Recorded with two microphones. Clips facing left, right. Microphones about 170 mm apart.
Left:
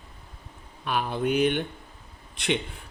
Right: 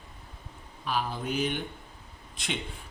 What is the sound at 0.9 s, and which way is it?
A man's voice, 60° left (ahead or behind).